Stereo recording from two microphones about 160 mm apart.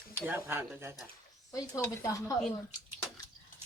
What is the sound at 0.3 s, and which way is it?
Speech, 15° right (ahead or behind).